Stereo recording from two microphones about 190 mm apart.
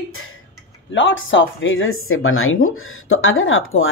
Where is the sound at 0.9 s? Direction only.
80° left.